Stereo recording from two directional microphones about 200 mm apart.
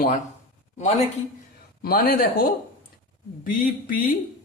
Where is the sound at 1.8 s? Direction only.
45° left (ahead or behind).